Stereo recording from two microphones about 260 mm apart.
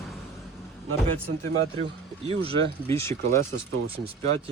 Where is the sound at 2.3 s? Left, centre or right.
Right.